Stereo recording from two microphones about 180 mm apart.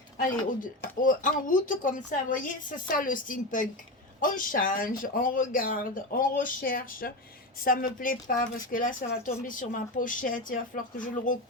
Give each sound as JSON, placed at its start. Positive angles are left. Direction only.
{"t": 0.2, "sound": "speech", "side_deg": 50}